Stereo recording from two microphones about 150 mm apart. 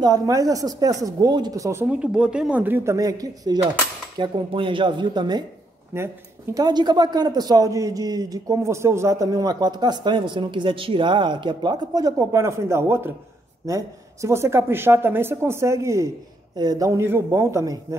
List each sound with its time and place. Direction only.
0.0 s a man's voice: 25° right (ahead or behind)
5.9 s speech: 15° right (ahead or behind)
6.5 s a man's voice: 25° right (ahead or behind)